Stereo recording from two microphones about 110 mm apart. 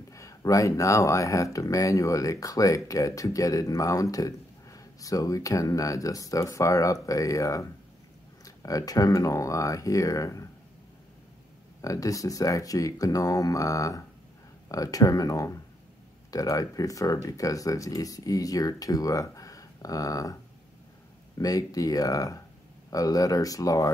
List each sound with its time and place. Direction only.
0.1 s speech: 30° left (ahead or behind)
11.8 s speech: 30° left (ahead or behind)
21.4 s speech: 35° left (ahead or behind)